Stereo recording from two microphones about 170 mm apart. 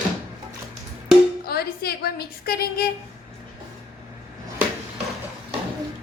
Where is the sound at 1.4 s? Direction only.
65° left (ahead or behind).